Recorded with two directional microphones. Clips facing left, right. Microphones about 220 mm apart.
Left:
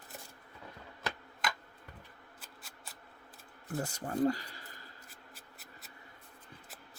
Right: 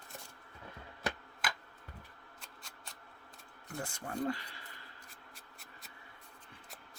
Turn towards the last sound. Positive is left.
turn(degrees=5)  # may be behind; listen again after turning